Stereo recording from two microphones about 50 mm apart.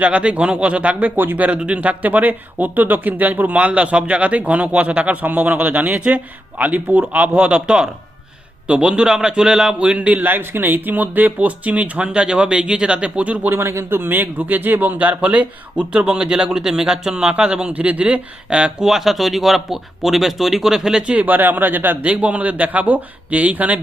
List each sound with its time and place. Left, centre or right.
0.0 s speech: right
1.5 s a man's voice: right
10.2 s speech: right
13.5 s speech: right
18.5 s a man's voice: centre
21.2 s a man's voice: right